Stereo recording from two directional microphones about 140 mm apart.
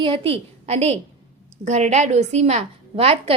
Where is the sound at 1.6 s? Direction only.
55° right (ahead or behind).